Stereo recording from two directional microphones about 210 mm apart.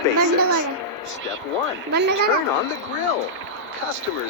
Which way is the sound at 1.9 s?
50° right (ahead or behind).